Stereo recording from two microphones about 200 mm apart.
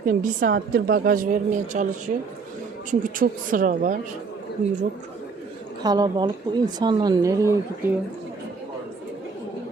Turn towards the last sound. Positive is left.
turn(degrees=-15)  # may be behind; listen again after turning